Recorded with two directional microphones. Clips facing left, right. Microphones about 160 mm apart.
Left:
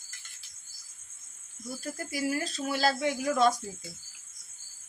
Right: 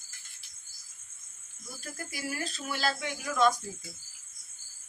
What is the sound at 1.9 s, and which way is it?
Speech, 35° left (ahead or behind).